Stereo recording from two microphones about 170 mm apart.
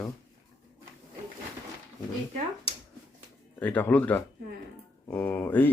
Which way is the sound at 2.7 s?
35° left (ahead or behind).